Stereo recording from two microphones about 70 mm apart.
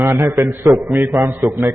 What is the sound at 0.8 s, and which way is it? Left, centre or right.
Speech, right.